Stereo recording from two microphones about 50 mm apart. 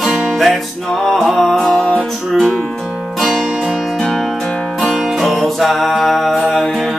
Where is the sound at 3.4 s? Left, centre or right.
Centre.